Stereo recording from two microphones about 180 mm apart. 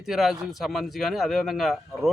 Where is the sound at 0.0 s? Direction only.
Centre (ahead or behind).